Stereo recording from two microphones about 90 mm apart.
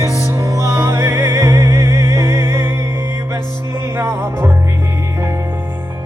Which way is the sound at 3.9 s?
30° right (ahead or behind).